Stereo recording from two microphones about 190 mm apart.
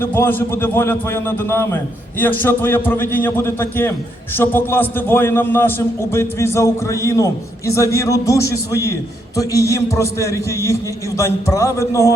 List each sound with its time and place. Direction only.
0.0 s a man's voice: 10° left (ahead or behind)